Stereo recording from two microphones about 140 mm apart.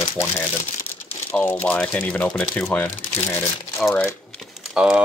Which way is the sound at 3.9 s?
20° left (ahead or behind).